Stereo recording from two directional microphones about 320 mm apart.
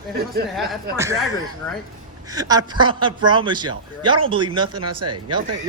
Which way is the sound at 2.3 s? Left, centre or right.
Centre.